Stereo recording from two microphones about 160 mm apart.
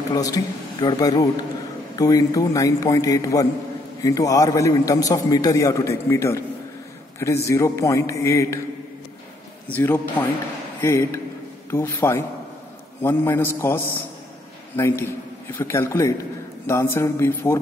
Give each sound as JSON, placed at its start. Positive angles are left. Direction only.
{"t": 0.1, "sound": "a man's voice", "side_deg": 20}
{"t": 9.8, "sound": "a man's voice", "side_deg": 10}